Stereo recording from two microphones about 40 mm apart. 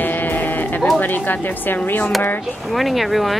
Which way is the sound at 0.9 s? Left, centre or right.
Left.